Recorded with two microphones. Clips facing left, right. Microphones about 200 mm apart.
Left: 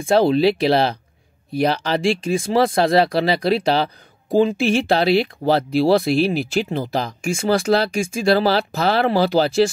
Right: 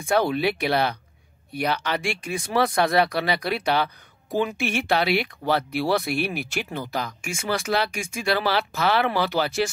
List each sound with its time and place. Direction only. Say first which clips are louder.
0.0 s speech: left 7 dB; 30° left (ahead or behind)